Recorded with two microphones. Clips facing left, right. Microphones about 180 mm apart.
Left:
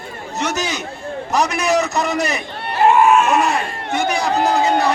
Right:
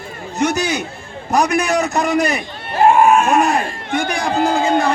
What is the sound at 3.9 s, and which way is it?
Speech, 55° right (ahead or behind).